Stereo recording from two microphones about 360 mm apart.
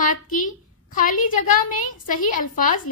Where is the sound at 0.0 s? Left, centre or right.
Left.